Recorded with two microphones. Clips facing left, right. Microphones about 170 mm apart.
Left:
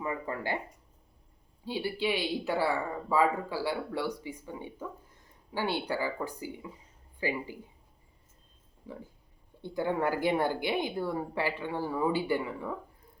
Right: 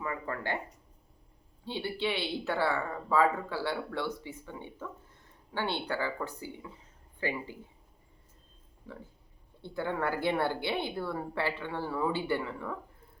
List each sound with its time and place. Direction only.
0.0 s speech: 20° left (ahead or behind)
1.6 s speech: 10° left (ahead or behind)
9.6 s speech: 15° left (ahead or behind)